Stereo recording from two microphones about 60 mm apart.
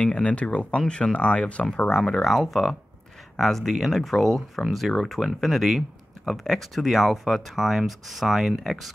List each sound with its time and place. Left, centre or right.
0.0 s speech: centre